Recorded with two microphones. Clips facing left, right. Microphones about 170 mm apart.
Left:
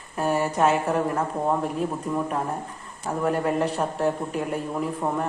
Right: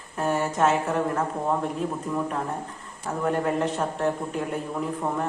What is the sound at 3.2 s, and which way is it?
Speech, 10° left (ahead or behind).